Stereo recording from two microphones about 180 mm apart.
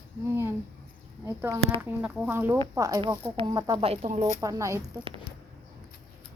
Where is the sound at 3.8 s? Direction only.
35° right (ahead or behind).